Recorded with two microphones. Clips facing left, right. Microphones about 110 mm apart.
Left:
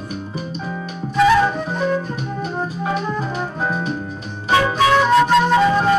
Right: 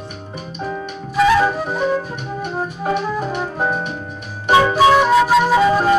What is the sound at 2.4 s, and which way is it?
Music, 60° right (ahead or behind).